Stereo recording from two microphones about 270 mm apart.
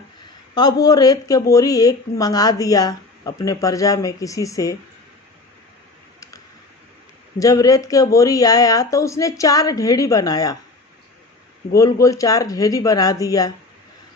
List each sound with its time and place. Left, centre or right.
0.5 s speech: centre
7.3 s speech: centre
11.7 s speech: centre